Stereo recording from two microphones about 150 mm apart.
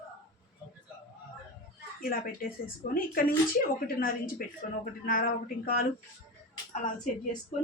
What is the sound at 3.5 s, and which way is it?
Speech, 70° left (ahead or behind).